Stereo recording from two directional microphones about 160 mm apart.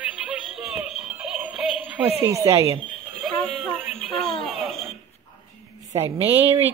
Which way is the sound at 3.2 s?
5° left (ahead or behind).